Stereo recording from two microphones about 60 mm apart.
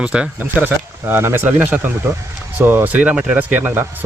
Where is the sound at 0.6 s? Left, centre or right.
Right.